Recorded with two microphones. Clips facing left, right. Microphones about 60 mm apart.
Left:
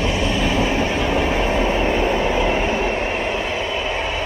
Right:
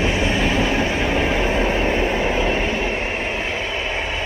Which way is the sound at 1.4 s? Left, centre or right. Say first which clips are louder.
Left 1 dB; centre.